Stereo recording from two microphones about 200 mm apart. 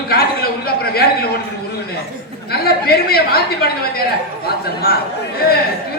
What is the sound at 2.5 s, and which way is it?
A man's voice, 50° left (ahead or behind).